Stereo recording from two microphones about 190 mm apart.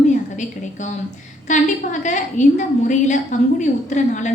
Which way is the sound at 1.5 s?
40° left (ahead or behind).